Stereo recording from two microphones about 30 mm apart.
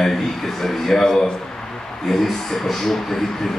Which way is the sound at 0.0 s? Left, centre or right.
Centre.